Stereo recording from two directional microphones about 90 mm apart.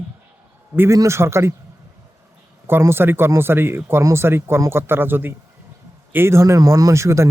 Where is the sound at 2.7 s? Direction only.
25° right (ahead or behind).